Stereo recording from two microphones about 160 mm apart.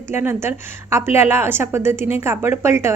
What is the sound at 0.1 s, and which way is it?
A woman's voice, 15° right (ahead or behind).